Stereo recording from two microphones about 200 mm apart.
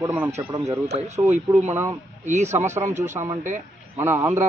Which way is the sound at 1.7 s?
10° right (ahead or behind).